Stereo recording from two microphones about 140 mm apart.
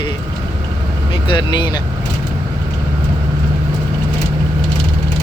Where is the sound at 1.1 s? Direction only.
35° left (ahead or behind).